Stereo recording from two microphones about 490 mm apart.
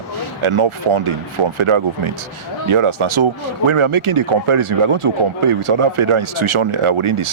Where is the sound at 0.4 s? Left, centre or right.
Right.